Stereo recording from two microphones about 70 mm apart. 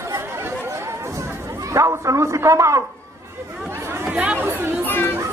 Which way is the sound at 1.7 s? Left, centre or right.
Right.